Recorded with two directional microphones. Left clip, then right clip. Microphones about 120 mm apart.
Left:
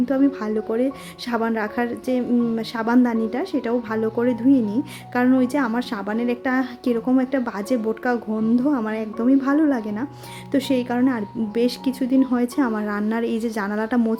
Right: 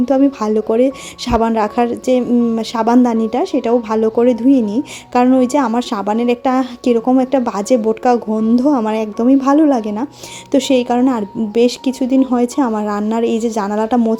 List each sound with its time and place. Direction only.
0.0 s a woman's voice: 35° right (ahead or behind)